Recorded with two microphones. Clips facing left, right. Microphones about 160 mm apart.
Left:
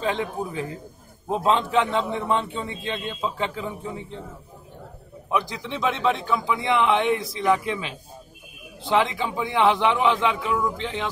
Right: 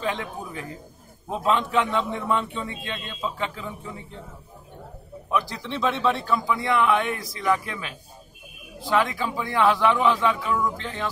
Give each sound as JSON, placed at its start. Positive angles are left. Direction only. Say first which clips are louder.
{"t": 0.0, "sound": "a man's voice", "louder": "left 3 dB", "side_deg": 25}
{"t": 5.3, "sound": "a man's voice", "louder": "left 1 dB", "side_deg": 15}